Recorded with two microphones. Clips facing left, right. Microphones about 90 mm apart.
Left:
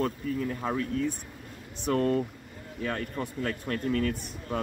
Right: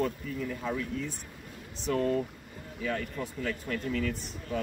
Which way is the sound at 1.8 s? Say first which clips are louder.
Left 2 dB; 55° left (ahead or behind).